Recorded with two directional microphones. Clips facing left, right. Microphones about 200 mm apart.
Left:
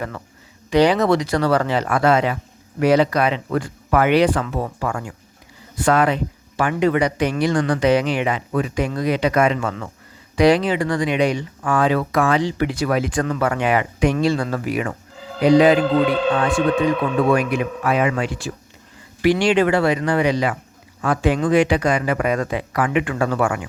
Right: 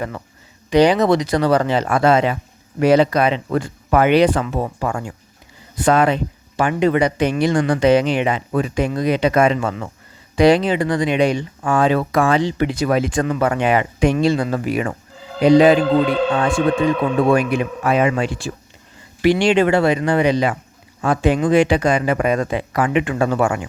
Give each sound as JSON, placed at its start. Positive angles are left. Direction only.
{"t": 0.7, "sound": "speech", "side_deg": -15}
{"t": 17.2, "sound": "speech", "side_deg": -25}